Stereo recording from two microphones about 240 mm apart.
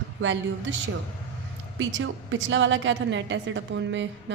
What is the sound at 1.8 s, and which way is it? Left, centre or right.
A woman's voice, right.